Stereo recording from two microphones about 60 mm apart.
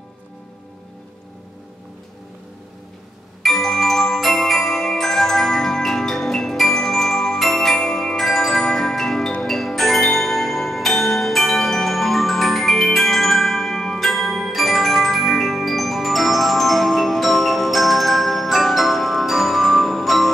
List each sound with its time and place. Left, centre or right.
3.4 s glockenspiel: centre
9.4 s tubular bells: centre